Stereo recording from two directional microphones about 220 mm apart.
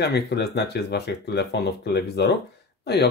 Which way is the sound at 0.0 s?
50° left (ahead or behind).